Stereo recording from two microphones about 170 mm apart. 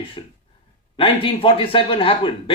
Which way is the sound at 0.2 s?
30° left (ahead or behind).